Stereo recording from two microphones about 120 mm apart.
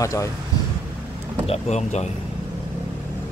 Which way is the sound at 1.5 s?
65° left (ahead or behind).